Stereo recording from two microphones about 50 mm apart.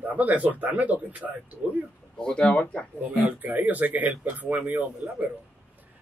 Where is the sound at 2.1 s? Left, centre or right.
Centre.